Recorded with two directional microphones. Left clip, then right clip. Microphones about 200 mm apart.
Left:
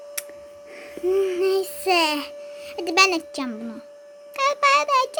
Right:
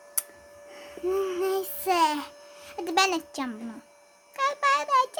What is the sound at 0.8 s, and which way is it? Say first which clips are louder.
Child singing: left 6 dB; 5° right (ahead or behind).